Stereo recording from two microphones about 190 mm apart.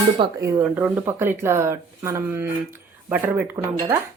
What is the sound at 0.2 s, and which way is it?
Speech, 15° right (ahead or behind).